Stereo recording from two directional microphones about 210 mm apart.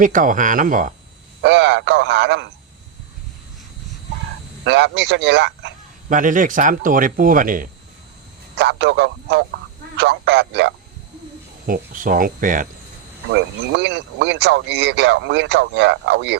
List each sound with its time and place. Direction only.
0.0 s speech: 40° right (ahead or behind)
1.4 s speech: 55° right (ahead or behind)
4.6 s speech: 55° right (ahead or behind)
6.1 s speech: 40° right (ahead or behind)
8.5 s speech: 55° right (ahead or behind)
11.6 s speech: 40° right (ahead or behind)
13.3 s speech: 55° right (ahead or behind)